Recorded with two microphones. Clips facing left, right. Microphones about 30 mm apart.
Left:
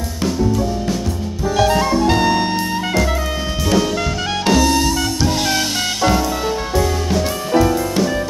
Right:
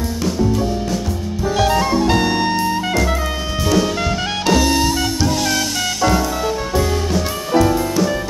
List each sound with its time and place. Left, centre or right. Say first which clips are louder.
1.6 s music: left 1 dB; centre
5.4 s music: left 1 dB; left
7.1 s music: left 1 dB; centre